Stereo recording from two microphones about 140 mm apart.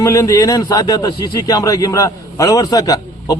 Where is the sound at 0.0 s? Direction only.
25° left (ahead or behind).